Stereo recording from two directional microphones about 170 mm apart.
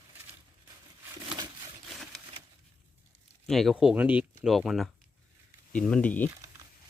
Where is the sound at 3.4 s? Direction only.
Centre (ahead or behind).